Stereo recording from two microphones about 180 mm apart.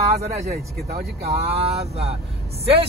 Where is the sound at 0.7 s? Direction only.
60° right (ahead or behind).